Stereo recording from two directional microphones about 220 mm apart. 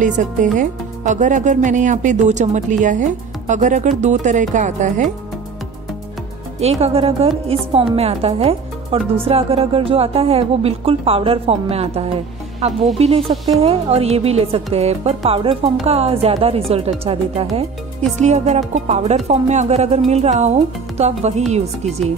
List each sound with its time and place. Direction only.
0.0 s speech: 35° right (ahead or behind)
6.6 s a woman's voice: 25° right (ahead or behind)